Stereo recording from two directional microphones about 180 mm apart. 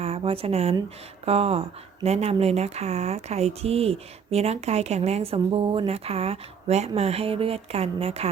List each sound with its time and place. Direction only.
0.0 s speech: 30° right (ahead or behind)